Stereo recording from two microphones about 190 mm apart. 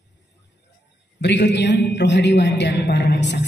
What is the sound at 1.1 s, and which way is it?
A woman's voice, 65° left (ahead or behind).